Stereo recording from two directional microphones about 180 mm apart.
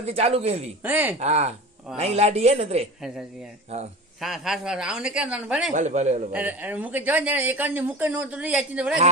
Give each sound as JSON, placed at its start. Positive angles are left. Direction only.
{"t": 0.0, "sound": "a woman's voice", "side_deg": -35}
{"t": 0.8, "sound": "a man's voice", "side_deg": -10}
{"t": 1.2, "sound": "a woman's voice", "side_deg": -35}
{"t": 4.2, "sound": "speech", "side_deg": 0}
{"t": 5.7, "sound": "a woman's voice", "side_deg": -40}
{"t": 6.3, "sound": "a man's voice", "side_deg": -10}